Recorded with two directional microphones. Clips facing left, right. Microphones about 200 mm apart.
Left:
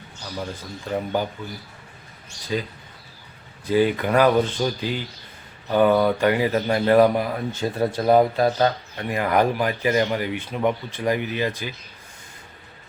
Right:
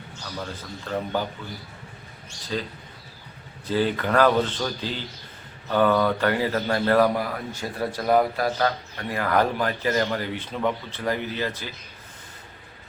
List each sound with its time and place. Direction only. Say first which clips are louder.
0.9 s speech: left 3 dB; 15° left (ahead or behind)
2.5 s speech: left 3 dB; 15° left (ahead or behind)
3.7 s speech: left 4 dB; 15° left (ahead or behind)